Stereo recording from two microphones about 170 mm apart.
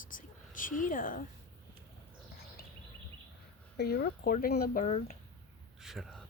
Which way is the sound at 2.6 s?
65° left (ahead or behind).